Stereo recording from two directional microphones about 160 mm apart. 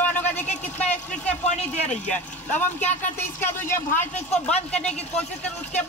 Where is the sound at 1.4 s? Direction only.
45° left (ahead or behind).